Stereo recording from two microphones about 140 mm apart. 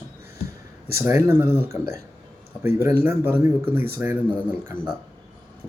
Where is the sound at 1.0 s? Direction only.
20° right (ahead or behind).